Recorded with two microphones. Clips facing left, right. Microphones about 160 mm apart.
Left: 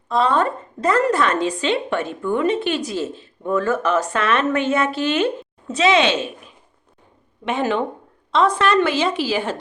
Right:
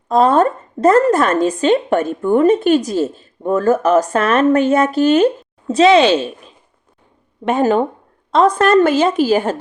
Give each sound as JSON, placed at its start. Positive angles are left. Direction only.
{"t": 0.1, "sound": "speech", "side_deg": -45}
{"t": 7.4, "sound": "a woman's voice", "side_deg": -45}